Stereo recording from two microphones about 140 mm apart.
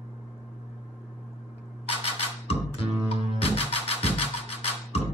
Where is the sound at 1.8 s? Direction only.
45° left (ahead or behind).